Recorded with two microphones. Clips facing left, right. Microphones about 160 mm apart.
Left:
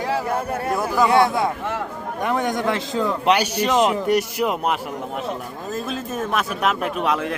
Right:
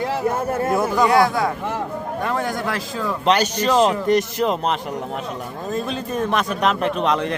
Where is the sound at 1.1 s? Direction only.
25° left (ahead or behind).